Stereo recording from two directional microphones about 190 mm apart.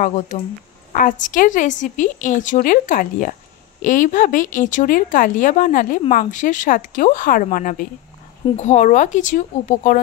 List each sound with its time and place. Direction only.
0.3 s a woman's voice: 40° left (ahead or behind)